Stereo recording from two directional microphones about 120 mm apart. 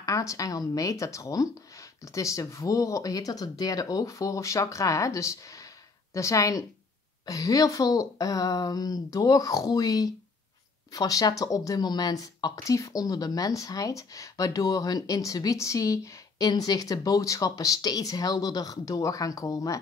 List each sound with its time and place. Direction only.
0.0 s speech: 25° left (ahead or behind)